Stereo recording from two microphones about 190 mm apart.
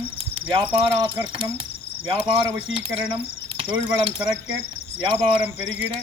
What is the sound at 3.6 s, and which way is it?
Speech, 25° right (ahead or behind).